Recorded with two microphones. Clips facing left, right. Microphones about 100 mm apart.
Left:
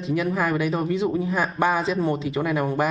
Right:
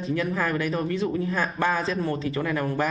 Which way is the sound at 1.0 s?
25° left (ahead or behind).